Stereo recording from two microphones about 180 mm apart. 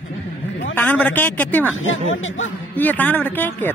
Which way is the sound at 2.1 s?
90° left.